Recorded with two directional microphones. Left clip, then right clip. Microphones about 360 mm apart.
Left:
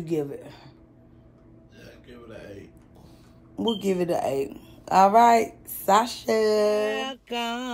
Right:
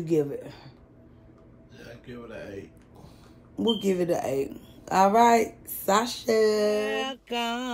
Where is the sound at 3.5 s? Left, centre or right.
Centre.